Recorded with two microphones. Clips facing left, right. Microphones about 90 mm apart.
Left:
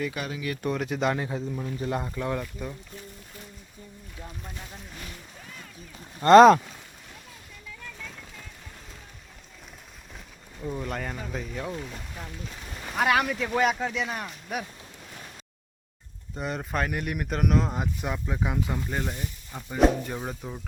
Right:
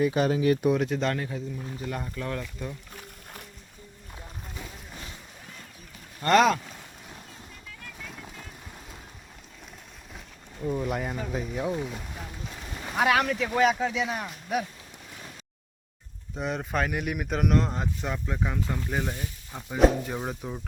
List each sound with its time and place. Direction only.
0.0 s speech: 30° right (ahead or behind)
0.6 s speech: centre (ahead or behind)
1.8 s speech: 25° left (ahead or behind)
6.1 s speech: 25° left (ahead or behind)
10.6 s speech: 5° right (ahead or behind)
16.3 s speech: centre (ahead or behind)
18.9 s speech: 5° right (ahead or behind)